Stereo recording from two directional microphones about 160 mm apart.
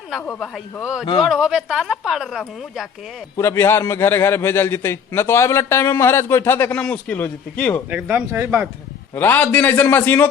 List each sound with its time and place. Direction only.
0.3 s speech: centre (ahead or behind)
3.3 s a man's voice: 15° left (ahead or behind)
7.9 s speech: 10° right (ahead or behind)
9.1 s a man's voice: 10° left (ahead or behind)